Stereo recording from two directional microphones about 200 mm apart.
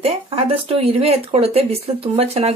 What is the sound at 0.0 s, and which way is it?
A man's voice, 30° right (ahead or behind).